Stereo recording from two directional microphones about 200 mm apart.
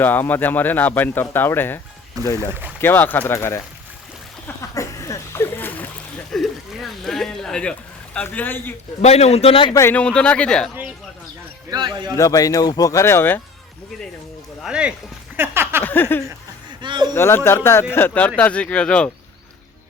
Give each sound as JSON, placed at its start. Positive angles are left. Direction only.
{"t": 0.0, "sound": "speech", "side_deg": 10}
{"t": 2.5, "sound": "speech", "side_deg": -10}
{"t": 2.8, "sound": "speech", "side_deg": 10}
{"t": 4.4, "sound": "splash", "side_deg": 15}
{"t": 6.3, "sound": "a sound", "side_deg": 0}
{"t": 9.0, "sound": "speech", "side_deg": 30}
{"t": 9.7, "sound": "speech", "side_deg": 10}
{"t": 11.7, "sound": "a man's voice", "side_deg": -20}
{"t": 12.1, "sound": "speech", "side_deg": 15}
{"t": 14.6, "sound": "a sound", "side_deg": -5}
{"t": 15.8, "sound": "speech", "side_deg": 10}
{"t": 16.8, "sound": "a sound", "side_deg": -25}
{"t": 17.2, "sound": "speech", "side_deg": 10}